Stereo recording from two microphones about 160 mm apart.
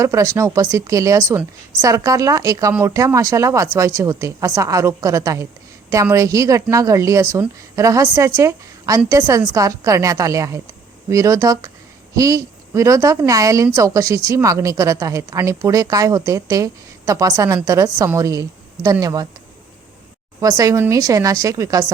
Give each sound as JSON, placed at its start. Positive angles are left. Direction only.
{"t": 0.0, "sound": "a woman's voice", "side_deg": -20}
{"t": 20.4, "sound": "a woman's voice", "side_deg": -20}